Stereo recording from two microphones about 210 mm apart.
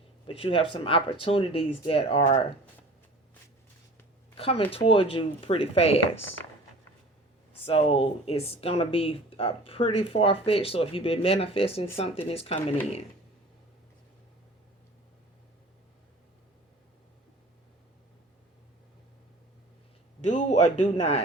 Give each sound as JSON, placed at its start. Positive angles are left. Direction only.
{"t": 0.3, "sound": "speech", "side_deg": 25}
{"t": 4.4, "sound": "speech", "side_deg": 25}
{"t": 7.6, "sound": "speech", "side_deg": 25}
{"t": 20.2, "sound": "a man's voice", "side_deg": 35}